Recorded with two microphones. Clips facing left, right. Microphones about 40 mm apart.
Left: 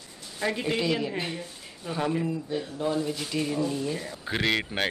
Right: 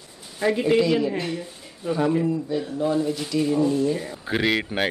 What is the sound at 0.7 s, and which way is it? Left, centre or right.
Speech, centre.